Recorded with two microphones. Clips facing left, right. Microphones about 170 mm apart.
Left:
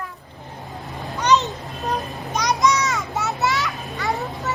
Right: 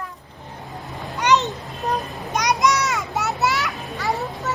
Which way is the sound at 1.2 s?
20° right (ahead or behind).